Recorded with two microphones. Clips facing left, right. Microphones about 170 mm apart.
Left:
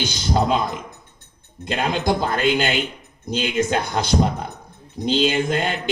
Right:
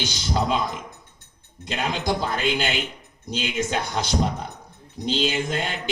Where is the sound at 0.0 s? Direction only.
50° left (ahead or behind).